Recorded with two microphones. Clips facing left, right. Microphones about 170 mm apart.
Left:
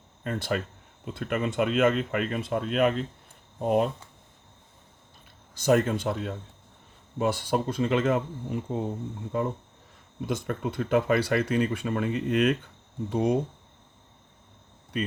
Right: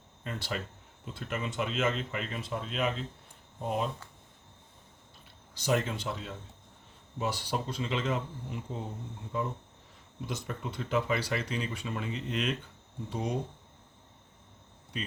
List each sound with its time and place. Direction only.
0.3 s speech: 50° left (ahead or behind)
5.5 s speech: 50° left (ahead or behind)
14.9 s speech: 55° left (ahead or behind)